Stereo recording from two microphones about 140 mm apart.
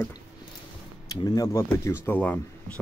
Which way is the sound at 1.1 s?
25° left (ahead or behind).